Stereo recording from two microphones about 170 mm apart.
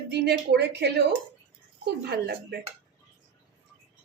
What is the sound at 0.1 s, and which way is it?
Speech, 80° right.